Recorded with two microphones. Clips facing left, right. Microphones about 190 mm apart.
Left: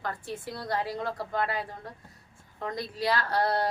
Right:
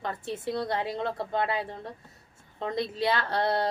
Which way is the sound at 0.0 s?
25° right (ahead or behind).